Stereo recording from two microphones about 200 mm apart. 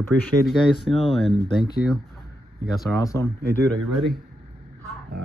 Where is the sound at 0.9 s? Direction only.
30° left (ahead or behind).